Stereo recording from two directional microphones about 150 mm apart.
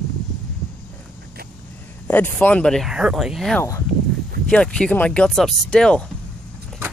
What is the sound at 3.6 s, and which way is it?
Speech, 20° left (ahead or behind).